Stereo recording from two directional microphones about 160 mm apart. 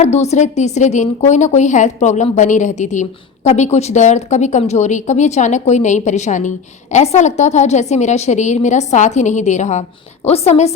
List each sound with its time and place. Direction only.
0.0 s a woman's voice: 45° left (ahead or behind)